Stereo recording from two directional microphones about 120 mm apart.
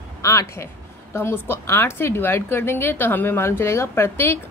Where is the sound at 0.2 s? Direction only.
30° left (ahead or behind).